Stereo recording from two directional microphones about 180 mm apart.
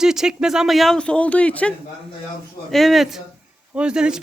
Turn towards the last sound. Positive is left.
turn(degrees=-5)  # may be behind; listen again after turning